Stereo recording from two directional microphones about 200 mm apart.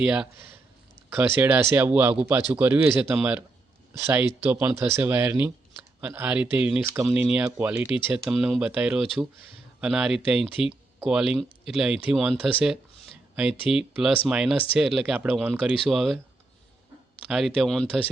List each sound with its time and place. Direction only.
0.0 s speech: 5° right (ahead or behind)
1.4 s speech: 10° right (ahead or behind)
17.3 s speech: centre (ahead or behind)